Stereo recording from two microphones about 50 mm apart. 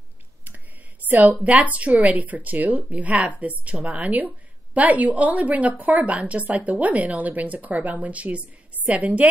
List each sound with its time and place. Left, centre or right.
1.0 s a woman's voice: right